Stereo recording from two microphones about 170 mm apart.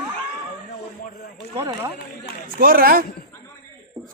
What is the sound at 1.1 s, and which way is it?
Speech, 55° left (ahead or behind).